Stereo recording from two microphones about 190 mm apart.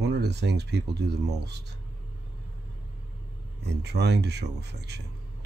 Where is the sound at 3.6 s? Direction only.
60° right (ahead or behind).